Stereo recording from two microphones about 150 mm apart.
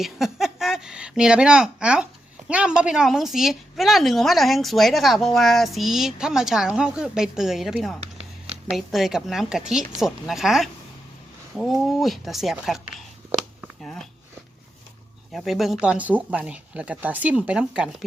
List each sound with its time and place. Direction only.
0.0 s a woman's voice: centre (ahead or behind)
15.3 s speech: centre (ahead or behind)